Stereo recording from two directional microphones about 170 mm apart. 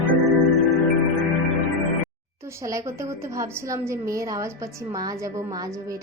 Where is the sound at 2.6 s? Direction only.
20° right (ahead or behind).